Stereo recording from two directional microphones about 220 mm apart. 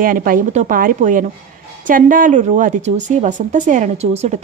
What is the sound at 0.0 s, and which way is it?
Speech, 40° right (ahead or behind).